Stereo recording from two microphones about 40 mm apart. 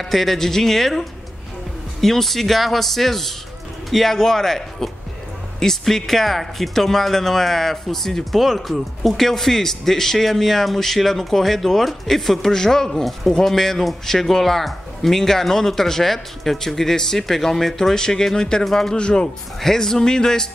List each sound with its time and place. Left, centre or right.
0.0 s a man's voice: centre
18.9 s a man's voice: left
19.6 s speech: centre